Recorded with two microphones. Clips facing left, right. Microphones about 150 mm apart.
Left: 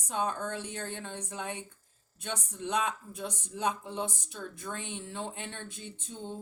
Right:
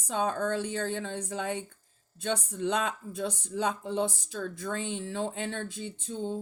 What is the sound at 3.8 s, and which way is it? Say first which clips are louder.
A woman's voice: right 6 dB; 90° right.